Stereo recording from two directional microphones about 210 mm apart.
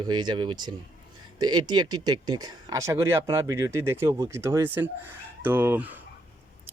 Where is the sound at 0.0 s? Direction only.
20° right (ahead or behind).